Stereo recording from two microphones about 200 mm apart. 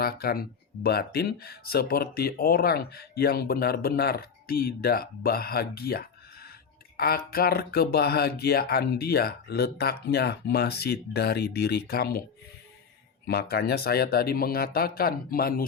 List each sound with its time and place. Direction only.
0.0 s speech: 50° left (ahead or behind)
13.2 s speech: 55° left (ahead or behind)